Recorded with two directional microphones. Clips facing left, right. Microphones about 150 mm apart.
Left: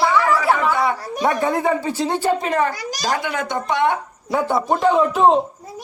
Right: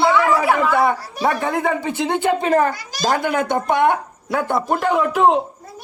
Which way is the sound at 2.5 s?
45° right (ahead or behind).